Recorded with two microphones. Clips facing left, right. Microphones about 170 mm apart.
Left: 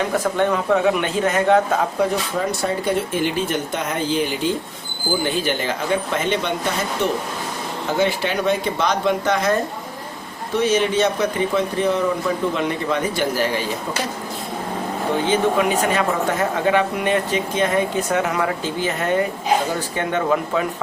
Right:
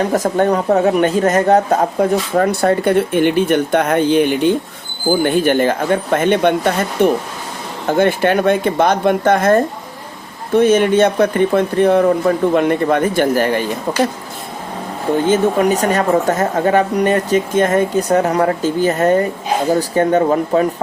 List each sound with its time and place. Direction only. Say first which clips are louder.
0.0 s speech: right 5 dB; 40° right (ahead or behind)
2.3 s speech: right 8 dB; 60° right (ahead or behind)
15.3 s speech: right 5 dB; 40° right (ahead or behind)